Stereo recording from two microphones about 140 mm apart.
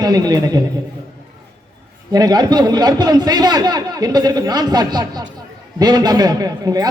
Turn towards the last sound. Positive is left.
turn(degrees=-25)  # may be behind; listen again after turning